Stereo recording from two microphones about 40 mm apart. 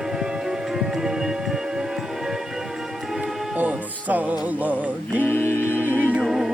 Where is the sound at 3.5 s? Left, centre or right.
Right.